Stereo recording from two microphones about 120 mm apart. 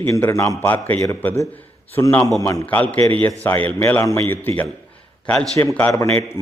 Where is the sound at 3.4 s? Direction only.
15° left (ahead or behind).